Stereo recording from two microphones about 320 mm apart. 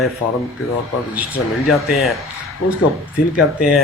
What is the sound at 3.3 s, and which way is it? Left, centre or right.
Speech, centre.